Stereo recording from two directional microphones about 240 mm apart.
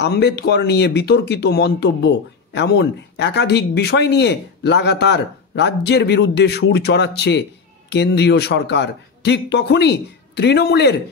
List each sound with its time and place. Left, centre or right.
0.0 s speech: left